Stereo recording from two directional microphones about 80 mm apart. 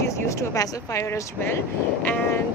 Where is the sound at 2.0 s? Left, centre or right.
Centre.